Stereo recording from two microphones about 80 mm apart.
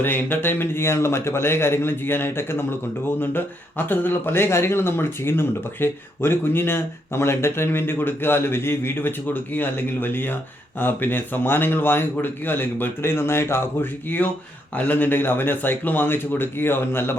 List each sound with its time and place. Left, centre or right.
0.0 s speech: left